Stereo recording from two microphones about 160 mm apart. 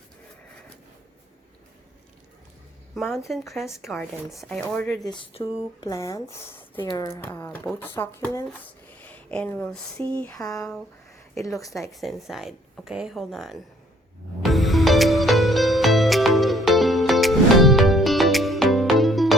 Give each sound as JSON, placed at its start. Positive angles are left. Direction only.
{"t": 2.9, "sound": "speech", "side_deg": 0}
{"t": 5.0, "sound": "speech", "side_deg": 25}
{"t": 10.4, "sound": "speech", "side_deg": 20}
{"t": 11.6, "sound": "speech", "side_deg": 0}
{"t": 14.4, "sound": "music", "side_deg": 0}